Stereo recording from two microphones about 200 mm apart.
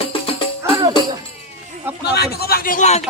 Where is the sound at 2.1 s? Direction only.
55° left (ahead or behind); by 3.0 s 35° left (ahead or behind).